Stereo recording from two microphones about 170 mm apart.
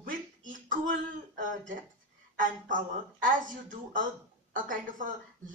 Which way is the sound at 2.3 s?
50° right (ahead or behind).